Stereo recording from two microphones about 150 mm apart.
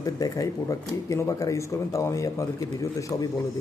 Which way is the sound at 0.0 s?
20° left (ahead or behind).